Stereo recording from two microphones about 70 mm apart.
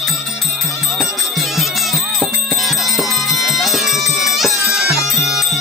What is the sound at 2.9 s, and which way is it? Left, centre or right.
Music, centre.